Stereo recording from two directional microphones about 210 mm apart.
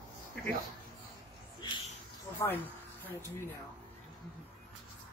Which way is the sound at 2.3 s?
10° left (ahead or behind).